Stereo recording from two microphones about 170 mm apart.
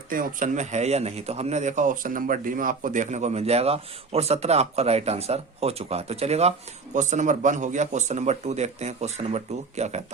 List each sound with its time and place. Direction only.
0.1 s a man's voice: 50° right (ahead or behind)